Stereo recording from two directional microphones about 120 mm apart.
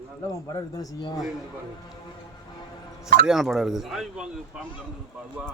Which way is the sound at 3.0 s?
Centre (ahead or behind).